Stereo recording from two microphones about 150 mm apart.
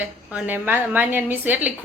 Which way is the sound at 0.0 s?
10° right (ahead or behind).